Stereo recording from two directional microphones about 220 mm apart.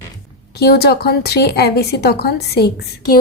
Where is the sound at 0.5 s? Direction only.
45° left (ahead or behind).